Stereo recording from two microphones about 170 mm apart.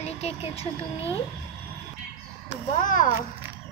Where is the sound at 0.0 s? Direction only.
35° left (ahead or behind).